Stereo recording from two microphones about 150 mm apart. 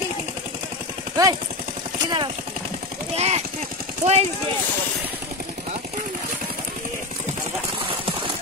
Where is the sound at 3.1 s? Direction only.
45° right (ahead or behind).